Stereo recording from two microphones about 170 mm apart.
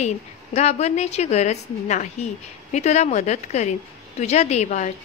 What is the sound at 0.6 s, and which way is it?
A woman's voice, 40° left (ahead or behind).